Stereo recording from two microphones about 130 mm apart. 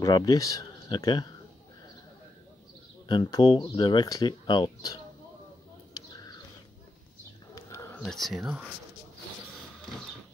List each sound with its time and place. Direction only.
0.0 s speech: 30° left (ahead or behind)
3.1 s speech: 30° left (ahead or behind)
7.5 s a sound: 25° left (ahead or behind)
7.9 s speech: 5° left (ahead or behind)